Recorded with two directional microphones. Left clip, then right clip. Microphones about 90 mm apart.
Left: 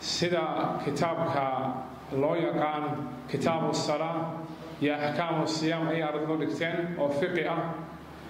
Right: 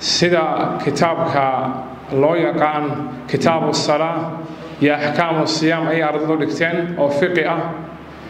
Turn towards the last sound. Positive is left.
turn(degrees=-25)  # may be behind; listen again after turning